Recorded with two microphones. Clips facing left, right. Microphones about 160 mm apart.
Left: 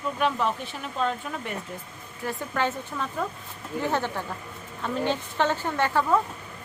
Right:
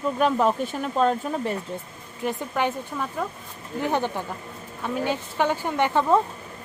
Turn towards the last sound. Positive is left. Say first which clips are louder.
# right 3 dB
turn(degrees=-20)  # may be behind; listen again after turning